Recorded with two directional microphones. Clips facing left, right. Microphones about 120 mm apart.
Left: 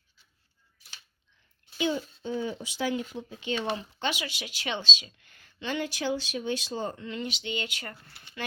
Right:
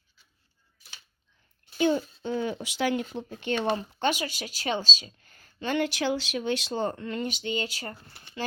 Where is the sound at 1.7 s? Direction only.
50° right (ahead or behind).